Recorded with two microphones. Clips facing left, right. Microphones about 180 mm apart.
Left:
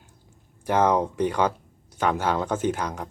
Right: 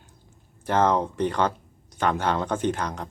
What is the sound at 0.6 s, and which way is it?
Speech, 10° left (ahead or behind).